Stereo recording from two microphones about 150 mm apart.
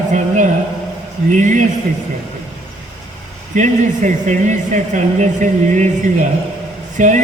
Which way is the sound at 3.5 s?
55° right (ahead or behind).